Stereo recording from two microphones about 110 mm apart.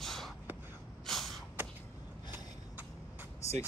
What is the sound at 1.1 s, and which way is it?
Gasp, centre (ahead or behind).